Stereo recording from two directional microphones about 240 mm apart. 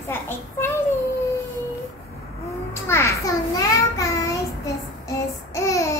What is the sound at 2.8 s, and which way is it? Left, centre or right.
A child's voice, centre.